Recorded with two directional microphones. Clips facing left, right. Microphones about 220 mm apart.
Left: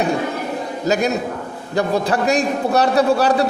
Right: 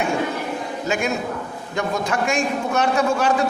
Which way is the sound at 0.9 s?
40° left (ahead or behind).